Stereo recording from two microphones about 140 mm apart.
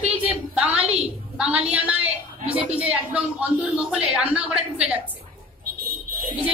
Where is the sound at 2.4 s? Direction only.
45° right (ahead or behind).